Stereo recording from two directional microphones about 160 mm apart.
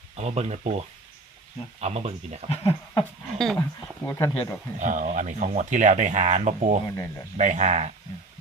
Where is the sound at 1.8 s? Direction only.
40° right (ahead or behind).